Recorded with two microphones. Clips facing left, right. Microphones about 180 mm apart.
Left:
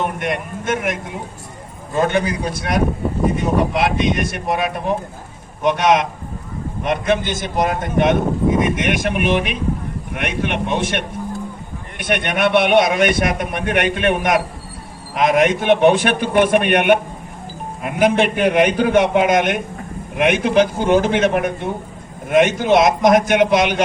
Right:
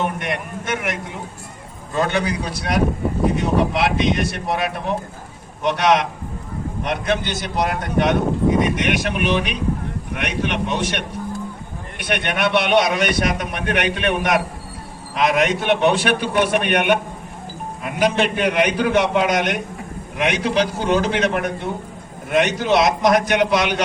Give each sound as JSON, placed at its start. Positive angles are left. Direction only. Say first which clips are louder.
{"t": 0.2, "sound": "a man's voice", "louder": "left 3 dB", "side_deg": 50}
{"t": 2.0, "sound": "a man's voice", "louder": "left 3 dB", "side_deg": 50}
{"t": 5.6, "sound": "a man's voice", "louder": "left 2 dB", "side_deg": 50}